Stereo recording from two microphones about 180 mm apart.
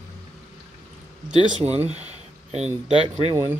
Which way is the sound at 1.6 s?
35° right (ahead or behind).